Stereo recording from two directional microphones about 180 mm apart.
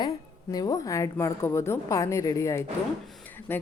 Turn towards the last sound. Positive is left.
turn(degrees=10)  # may be behind; listen again after turning